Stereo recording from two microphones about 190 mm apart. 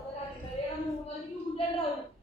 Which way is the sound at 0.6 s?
30° left (ahead or behind).